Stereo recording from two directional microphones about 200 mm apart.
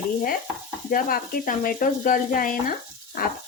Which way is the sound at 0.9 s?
45° left (ahead or behind).